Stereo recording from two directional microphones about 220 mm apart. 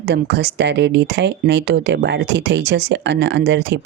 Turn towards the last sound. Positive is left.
turn(degrees=-50)  # may be behind; listen again after turning